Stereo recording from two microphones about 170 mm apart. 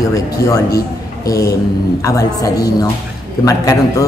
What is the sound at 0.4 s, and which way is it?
Speech, 75° left (ahead or behind).